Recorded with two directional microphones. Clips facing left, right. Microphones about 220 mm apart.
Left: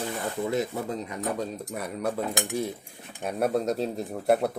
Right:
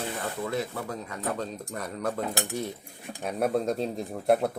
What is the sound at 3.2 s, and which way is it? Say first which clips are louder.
Speech: left 1 dB; centre (ahead or behind).